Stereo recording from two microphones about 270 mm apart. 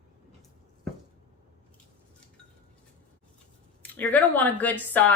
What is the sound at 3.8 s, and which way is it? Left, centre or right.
Speech, centre.